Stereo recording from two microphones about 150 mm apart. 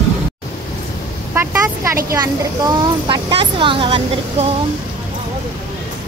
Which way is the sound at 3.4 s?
35° right (ahead or behind).